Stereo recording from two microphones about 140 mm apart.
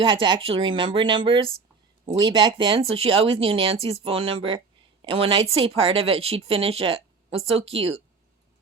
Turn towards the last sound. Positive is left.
turn(degrees=-45)  # may be behind; listen again after turning